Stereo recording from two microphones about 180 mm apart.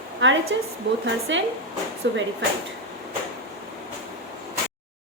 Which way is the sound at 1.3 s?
90° right.